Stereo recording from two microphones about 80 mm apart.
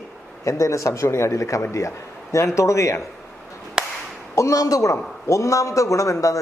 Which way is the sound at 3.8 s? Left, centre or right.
Centre.